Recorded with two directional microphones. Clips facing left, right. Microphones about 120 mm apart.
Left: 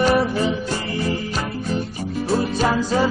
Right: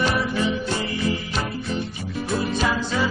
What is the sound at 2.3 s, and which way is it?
Music, 40° left (ahead or behind).